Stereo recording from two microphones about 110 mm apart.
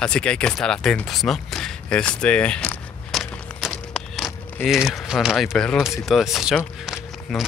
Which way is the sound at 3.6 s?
5° left (ahead or behind).